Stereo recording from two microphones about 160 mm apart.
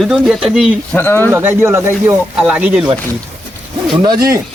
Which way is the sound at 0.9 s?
15° left (ahead or behind).